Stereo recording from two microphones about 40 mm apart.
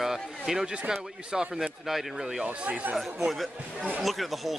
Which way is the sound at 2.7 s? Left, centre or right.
Right.